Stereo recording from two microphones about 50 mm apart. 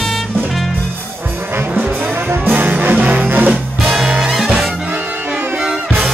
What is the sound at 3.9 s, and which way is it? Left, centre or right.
Music, centre.